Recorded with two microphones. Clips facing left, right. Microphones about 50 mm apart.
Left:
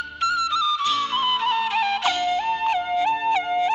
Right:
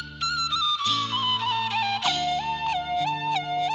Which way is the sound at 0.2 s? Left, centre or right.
Left.